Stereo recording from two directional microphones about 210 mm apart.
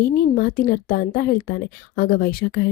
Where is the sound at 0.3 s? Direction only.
45° left (ahead or behind).